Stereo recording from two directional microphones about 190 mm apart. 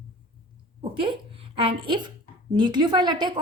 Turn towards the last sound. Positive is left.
turn(degrees=-20)  # may be behind; listen again after turning